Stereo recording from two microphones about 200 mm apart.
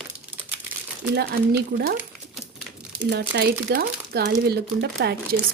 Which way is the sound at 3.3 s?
55° right (ahead or behind).